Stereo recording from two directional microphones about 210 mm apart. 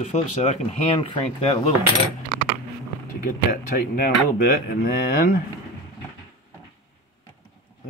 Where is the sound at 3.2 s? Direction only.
40° left (ahead or behind).